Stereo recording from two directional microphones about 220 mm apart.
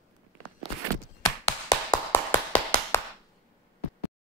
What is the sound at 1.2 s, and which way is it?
Tap, 15° left (ahead or behind).